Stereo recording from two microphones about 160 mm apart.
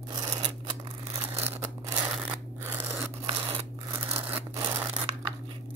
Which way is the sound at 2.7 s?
15° right (ahead or behind).